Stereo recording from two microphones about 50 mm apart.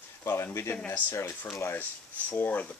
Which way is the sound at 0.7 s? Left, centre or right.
Left.